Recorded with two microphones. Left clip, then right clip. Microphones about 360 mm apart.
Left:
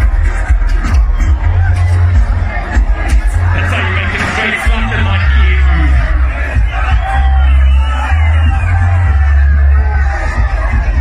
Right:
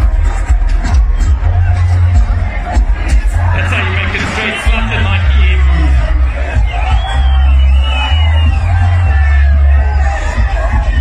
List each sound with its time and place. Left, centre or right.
3.1 s music: centre